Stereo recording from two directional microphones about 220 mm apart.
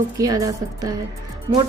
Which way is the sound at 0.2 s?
15° right (ahead or behind).